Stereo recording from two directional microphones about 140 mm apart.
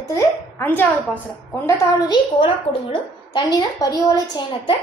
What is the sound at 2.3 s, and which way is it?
A woman's voice, 40° left (ahead or behind).